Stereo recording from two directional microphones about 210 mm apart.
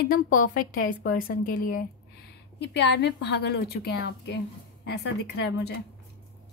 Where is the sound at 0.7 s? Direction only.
40° left (ahead or behind).